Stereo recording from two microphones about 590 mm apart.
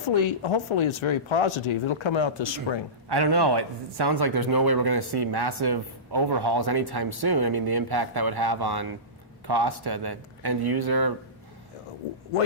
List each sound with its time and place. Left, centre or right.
0.0 s speech: left
3.1 s a man's voice: right